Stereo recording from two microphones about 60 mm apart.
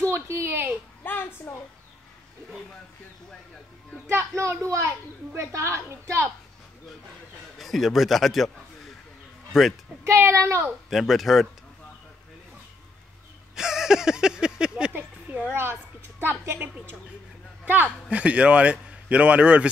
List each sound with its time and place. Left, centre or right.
0.0 s speech: right
1.0 s a sound: left
1.5 s a child's voice: left
4.2 s a woman's voice: right
7.5 s a man's voice: centre
9.5 s speech: centre
10.0 s a woman's voice: right
10.9 s a man's voice: centre
13.6 s a sound: centre
14.9 s a sound: right
15.5 s a woman's voice: right
18.1 s speech: right